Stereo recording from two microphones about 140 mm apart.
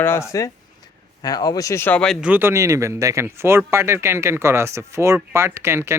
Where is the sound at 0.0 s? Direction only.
20° left (ahead or behind).